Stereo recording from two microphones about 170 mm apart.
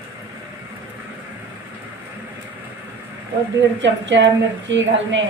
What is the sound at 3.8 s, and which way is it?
Speech, 90° right.